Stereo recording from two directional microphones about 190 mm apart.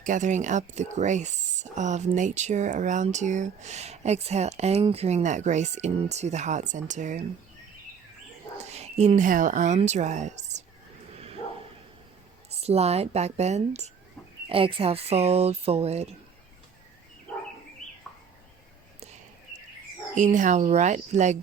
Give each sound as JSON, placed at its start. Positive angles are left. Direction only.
{"t": 0.0, "sound": "speech", "side_deg": -40}
{"t": 8.6, "sound": "a woman's voice", "side_deg": -35}
{"t": 11.2, "sound": "bow-wow", "side_deg": -30}
{"t": 12.5, "sound": "speech", "side_deg": -35}
{"t": 20.1, "sound": "speech", "side_deg": -40}